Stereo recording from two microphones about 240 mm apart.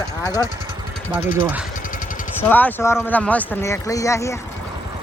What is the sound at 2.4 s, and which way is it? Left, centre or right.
Speech, centre.